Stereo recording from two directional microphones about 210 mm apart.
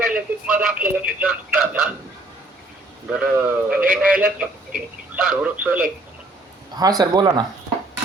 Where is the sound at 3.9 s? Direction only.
5° right (ahead or behind).